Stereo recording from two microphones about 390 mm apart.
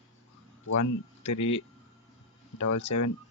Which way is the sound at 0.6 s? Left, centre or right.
Left.